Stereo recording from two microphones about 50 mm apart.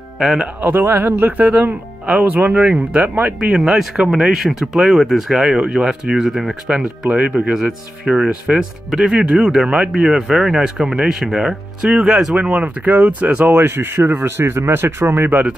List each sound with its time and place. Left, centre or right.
0.6 s speech: right
3.0 s speech: right
3.5 s speech: centre
5.5 s speech: centre
7.1 s speech: right
12.4 s speech: right
13.5 s speech: right
15.0 s speech: right